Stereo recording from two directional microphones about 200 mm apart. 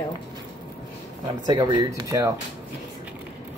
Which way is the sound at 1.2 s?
20° right (ahead or behind).